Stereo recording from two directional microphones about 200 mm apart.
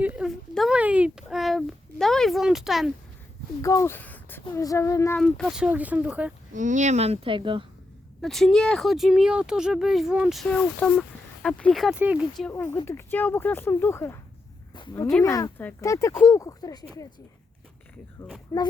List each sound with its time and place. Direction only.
0.0 s a sound: 5° right (ahead or behind)
3.6 s speech: 15° left (ahead or behind)
5.2 s speech: centre (ahead or behind)
6.5 s speech: 40° right (ahead or behind)
8.2 s speech: centre (ahead or behind)
12.7 s speech: 10° left (ahead or behind)
18.5 s speech: 15° left (ahead or behind)